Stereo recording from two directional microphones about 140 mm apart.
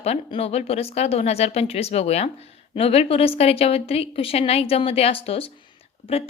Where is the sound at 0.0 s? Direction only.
45° left (ahead or behind).